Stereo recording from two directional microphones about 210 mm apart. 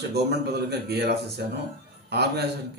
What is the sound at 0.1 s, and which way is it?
Speech, 50° right (ahead or behind).